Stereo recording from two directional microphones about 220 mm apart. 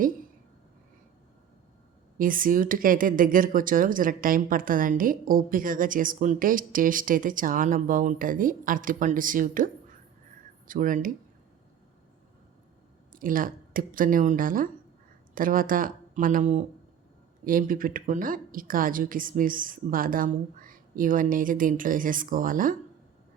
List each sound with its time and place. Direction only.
2.1 s speech: 40° right (ahead or behind)
10.7 s speech: 35° right (ahead or behind)
13.1 s speech: 40° right (ahead or behind)